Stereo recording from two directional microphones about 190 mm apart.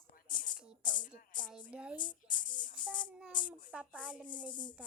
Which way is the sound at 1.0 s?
45° left (ahead or behind).